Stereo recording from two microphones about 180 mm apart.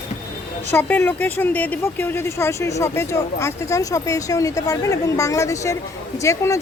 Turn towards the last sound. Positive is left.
turn(degrees=15)  # may be behind; listen again after turning